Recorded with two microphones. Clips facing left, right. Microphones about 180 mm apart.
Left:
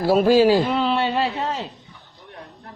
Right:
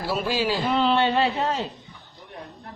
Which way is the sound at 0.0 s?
45° left (ahead or behind).